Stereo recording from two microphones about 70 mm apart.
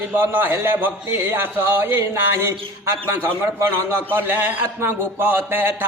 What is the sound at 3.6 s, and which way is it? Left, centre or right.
A man's voice, right.